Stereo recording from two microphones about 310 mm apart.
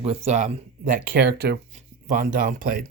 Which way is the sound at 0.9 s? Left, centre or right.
Right.